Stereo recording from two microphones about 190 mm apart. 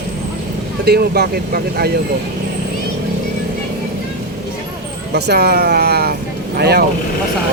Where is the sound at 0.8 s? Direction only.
60° right (ahead or behind).